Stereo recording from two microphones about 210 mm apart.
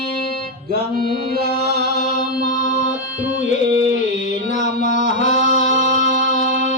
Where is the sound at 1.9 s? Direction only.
45° left (ahead or behind).